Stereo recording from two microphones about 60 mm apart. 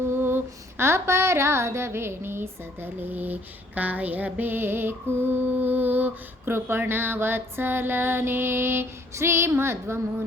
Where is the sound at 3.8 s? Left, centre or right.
Right.